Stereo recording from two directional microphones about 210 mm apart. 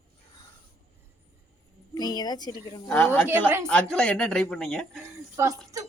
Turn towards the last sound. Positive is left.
turn(degrees=-15)  # may be behind; listen again after turning